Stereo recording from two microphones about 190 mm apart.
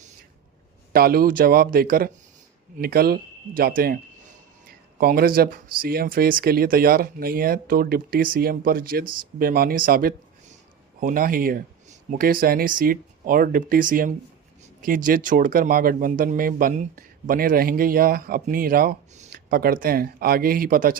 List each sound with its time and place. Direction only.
0.9 s speech: 50° right (ahead or behind)